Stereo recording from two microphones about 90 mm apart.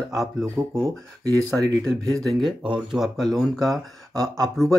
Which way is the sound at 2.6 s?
5° right (ahead or behind).